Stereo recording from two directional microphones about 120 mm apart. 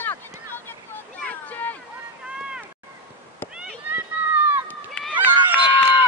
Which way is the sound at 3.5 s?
10° right (ahead or behind).